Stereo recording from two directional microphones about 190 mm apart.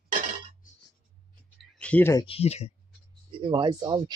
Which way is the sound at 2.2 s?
30° left (ahead or behind).